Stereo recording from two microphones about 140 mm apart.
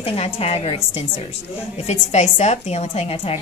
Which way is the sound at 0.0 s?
45° left (ahead or behind).